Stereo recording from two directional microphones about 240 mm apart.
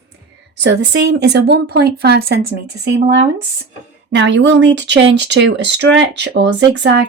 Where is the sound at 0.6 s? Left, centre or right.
Right.